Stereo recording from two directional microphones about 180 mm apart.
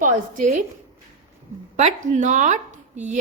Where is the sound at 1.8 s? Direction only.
40° right (ahead or behind).